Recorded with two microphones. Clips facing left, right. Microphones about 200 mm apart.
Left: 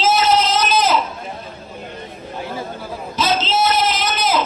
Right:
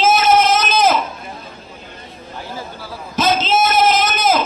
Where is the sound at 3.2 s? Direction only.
50° right (ahead or behind).